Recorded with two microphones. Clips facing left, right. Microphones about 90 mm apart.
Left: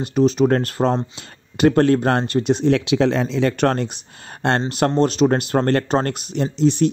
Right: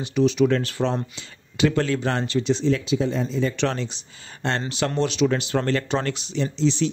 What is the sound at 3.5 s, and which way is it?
Speech, 50° left (ahead or behind).